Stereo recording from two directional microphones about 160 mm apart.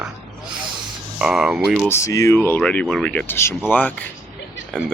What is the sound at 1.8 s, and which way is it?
Speech, 15° left (ahead or behind).